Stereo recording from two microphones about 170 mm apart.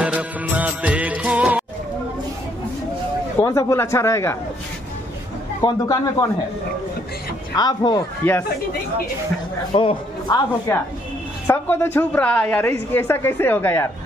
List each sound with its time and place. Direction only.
0.0 s music of bollywood: 10° right (ahead or behind)
3.3 s a woman's voice: 20° left (ahead or behind)
5.6 s speech: 20° left (ahead or behind)
7.5 s speech: 25° left (ahead or behind)
8.2 s a woman's voice: 10° left (ahead or behind)
9.8 s speech: 25° left (ahead or behind)
11.4 s a woman's voice: 10° left (ahead or behind)